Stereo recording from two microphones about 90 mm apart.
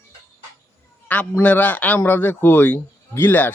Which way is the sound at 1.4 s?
15° left (ahead or behind).